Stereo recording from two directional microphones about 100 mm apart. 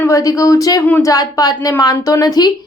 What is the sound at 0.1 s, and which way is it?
A woman's voice, 35° left (ahead or behind).